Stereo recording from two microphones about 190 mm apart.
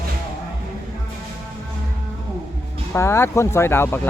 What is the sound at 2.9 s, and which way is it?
Speech, 15° left (ahead or behind).